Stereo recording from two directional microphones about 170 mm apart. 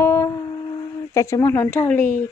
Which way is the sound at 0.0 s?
20° left (ahead or behind).